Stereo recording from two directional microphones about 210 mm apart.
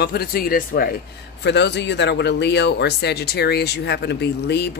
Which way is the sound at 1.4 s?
55° left (ahead or behind).